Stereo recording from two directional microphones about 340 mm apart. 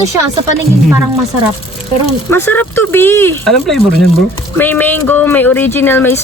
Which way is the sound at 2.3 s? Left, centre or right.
Centre.